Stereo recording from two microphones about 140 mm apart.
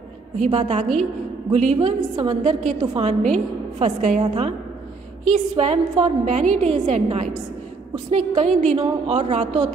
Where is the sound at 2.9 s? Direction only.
55° right (ahead or behind).